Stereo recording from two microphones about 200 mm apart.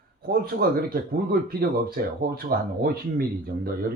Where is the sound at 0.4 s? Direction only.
50° right (ahead or behind).